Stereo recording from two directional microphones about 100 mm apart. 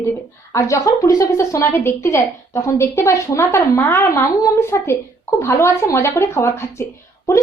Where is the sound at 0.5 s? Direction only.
30° left (ahead or behind).